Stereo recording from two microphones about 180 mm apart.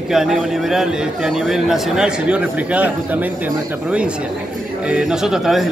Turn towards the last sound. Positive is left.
turn(degrees=0)  # may be behind; listen again after turning